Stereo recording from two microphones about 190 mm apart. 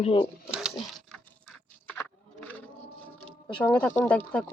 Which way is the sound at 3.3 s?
5° left (ahead or behind).